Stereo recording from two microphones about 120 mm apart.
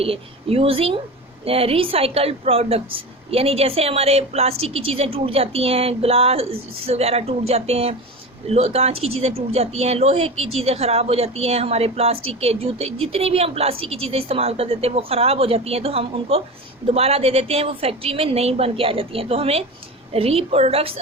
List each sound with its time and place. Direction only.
0.0 s a woman's voice: 55° right (ahead or behind)